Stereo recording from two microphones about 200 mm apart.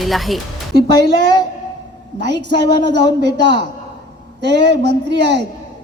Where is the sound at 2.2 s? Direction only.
60° right (ahead or behind).